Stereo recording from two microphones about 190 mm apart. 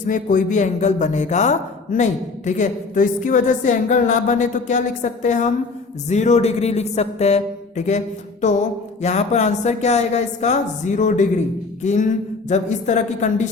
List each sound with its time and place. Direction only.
0.1 s a man's voice: 45° left (ahead or behind)